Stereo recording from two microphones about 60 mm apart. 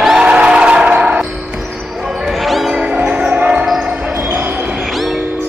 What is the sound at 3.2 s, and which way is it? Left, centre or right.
Basketball bounce, right.